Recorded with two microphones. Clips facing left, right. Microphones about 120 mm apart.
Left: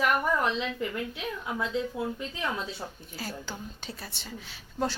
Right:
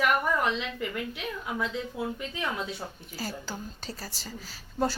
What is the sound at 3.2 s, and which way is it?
A woman's voice, 5° right (ahead or behind).